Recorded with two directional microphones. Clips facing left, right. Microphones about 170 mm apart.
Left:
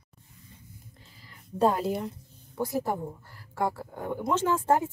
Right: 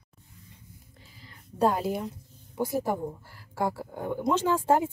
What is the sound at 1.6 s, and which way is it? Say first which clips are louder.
Speech: left 1 dB; centre (ahead or behind).